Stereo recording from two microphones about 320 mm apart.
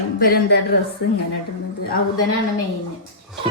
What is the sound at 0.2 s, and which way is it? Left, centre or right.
Speech, left.